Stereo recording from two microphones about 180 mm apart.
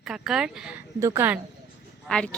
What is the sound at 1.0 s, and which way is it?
Speech, 15° right (ahead or behind).